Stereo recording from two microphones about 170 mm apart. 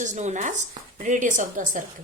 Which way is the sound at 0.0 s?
45° right (ahead or behind).